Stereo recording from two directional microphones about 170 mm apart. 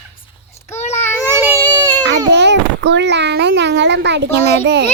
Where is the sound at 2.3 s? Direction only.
90° right.